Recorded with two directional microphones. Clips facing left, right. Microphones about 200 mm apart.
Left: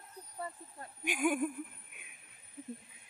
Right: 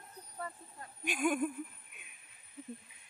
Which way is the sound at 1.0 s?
10° left (ahead or behind).